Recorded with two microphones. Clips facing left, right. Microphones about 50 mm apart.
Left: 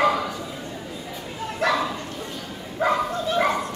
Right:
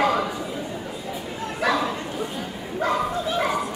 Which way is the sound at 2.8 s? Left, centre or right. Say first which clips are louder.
Left 2 dB; centre.